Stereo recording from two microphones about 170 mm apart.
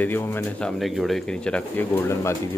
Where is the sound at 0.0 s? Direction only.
10° left (ahead or behind).